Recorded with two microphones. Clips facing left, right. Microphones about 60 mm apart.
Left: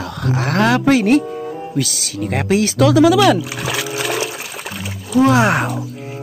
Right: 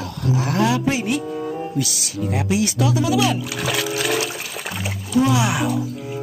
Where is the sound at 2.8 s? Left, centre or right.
Left.